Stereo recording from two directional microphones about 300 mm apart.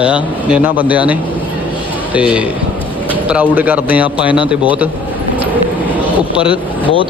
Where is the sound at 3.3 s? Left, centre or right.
Centre.